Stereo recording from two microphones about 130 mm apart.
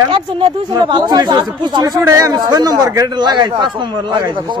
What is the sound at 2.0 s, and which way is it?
A man's voice, 25° right (ahead or behind).